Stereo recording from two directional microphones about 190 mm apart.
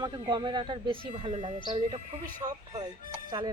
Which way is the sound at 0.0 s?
25° right (ahead or behind).